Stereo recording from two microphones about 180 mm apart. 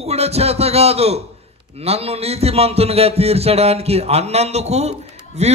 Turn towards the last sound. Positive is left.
turn(degrees=-35)  # may be behind; listen again after turning